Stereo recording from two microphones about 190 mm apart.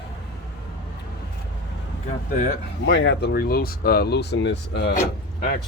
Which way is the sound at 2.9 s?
70° left (ahead or behind).